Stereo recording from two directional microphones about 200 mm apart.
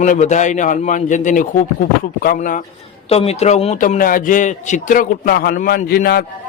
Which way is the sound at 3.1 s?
30° left (ahead or behind).